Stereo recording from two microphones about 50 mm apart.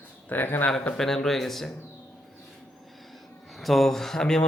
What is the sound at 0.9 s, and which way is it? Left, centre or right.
Speech, centre.